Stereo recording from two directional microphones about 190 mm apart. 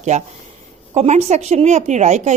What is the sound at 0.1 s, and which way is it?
Speech, 35° right (ahead or behind).